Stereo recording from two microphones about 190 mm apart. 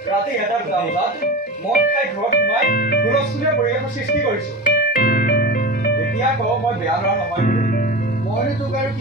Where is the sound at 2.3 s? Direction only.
50° left (ahead or behind).